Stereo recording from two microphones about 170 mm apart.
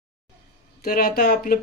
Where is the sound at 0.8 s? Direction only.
60° left (ahead or behind).